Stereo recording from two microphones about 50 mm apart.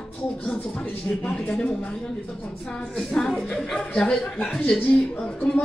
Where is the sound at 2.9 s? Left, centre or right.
Centre.